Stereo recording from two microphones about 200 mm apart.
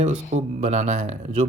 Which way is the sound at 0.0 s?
30° right (ahead or behind).